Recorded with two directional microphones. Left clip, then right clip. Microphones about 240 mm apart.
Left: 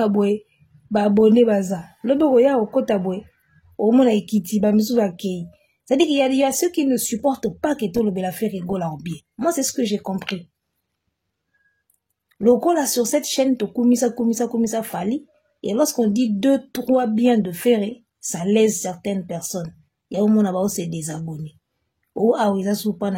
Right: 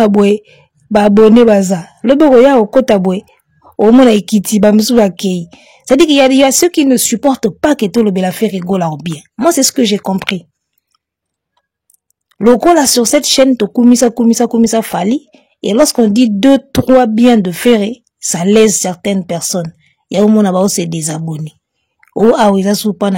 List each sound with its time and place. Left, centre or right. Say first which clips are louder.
0.0 s speech: right 10 dB; right
12.3 s speech: right 9 dB; right